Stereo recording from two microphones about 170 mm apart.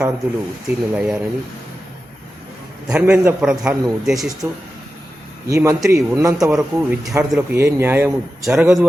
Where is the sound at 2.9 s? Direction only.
10° right (ahead or behind).